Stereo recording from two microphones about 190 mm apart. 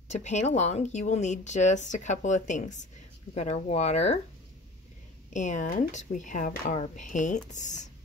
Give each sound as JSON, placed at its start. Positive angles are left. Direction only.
{"t": 0.1, "sound": "speech", "side_deg": 35}
{"t": 5.3, "sound": "speech", "side_deg": 40}